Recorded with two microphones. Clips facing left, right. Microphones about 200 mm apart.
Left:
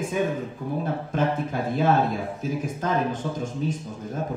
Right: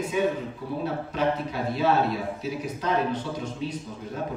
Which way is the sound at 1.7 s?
50° left (ahead or behind).